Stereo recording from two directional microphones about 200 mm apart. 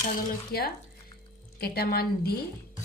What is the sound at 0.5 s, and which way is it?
Speech, 50° left (ahead or behind).